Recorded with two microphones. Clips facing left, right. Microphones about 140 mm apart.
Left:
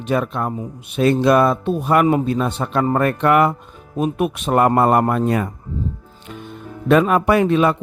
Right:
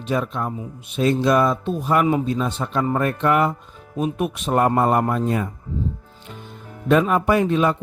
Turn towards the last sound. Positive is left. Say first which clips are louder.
# left 3 dB
turn(degrees=75)  # may be behind; listen again after turning